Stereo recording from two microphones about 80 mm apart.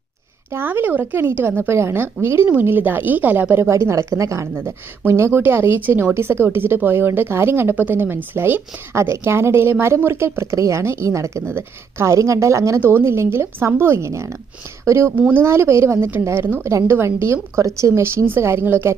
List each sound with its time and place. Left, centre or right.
0.5 s a woman's voice: right